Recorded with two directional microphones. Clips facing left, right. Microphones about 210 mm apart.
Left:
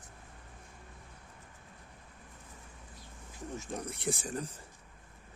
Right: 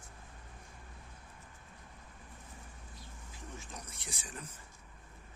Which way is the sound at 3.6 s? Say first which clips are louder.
Left 10 dB; 55° left (ahead or behind).